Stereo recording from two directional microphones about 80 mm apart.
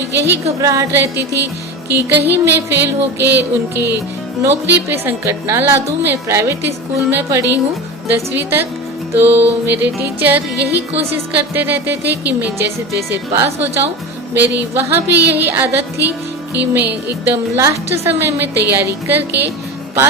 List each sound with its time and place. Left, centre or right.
0.2 s a woman's voice: right
1.9 s speech: right
5.2 s a woman's voice: right